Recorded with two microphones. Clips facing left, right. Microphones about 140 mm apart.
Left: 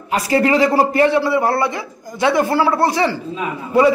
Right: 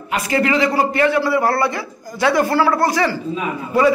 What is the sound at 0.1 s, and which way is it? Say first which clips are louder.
A man's voice: left 3 dB; 35° left (ahead or behind).